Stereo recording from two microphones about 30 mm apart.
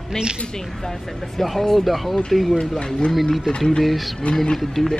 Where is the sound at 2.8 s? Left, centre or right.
Left.